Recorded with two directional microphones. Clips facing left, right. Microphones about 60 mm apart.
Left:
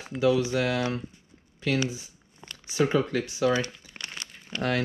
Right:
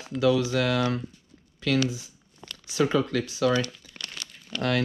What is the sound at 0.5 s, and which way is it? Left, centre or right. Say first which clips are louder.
Speech: right 1 dB; right.